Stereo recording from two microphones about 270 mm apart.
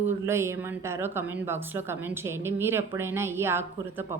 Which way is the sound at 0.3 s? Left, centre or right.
Centre.